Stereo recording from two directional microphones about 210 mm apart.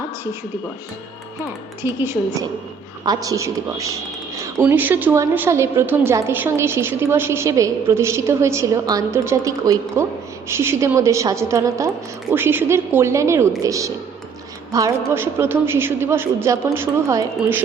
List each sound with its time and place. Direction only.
1.8 s a woman's voice: 10° right (ahead or behind)